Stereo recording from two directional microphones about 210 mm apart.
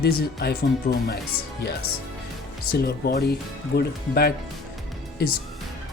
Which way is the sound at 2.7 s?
50° left (ahead or behind).